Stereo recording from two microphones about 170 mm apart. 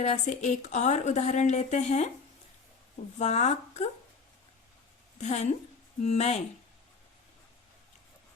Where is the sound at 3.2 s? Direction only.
40° left (ahead or behind).